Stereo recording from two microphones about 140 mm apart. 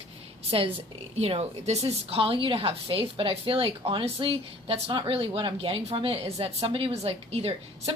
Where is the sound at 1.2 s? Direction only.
45° right (ahead or behind).